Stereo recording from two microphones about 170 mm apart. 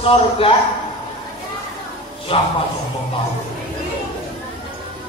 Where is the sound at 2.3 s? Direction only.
30° left (ahead or behind).